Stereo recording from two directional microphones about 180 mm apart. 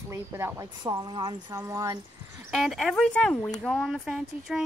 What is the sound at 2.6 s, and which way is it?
Speech, centre (ahead or behind).